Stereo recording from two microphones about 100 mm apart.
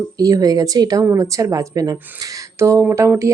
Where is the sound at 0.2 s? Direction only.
35° right (ahead or behind).